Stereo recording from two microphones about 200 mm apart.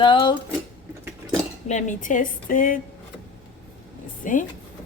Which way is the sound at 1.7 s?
40° left (ahead or behind).